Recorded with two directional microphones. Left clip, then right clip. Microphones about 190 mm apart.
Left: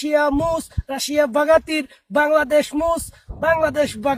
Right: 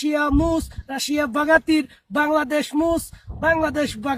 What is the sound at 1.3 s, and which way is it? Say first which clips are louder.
Speech: right 1 dB; 15° left (ahead or behind).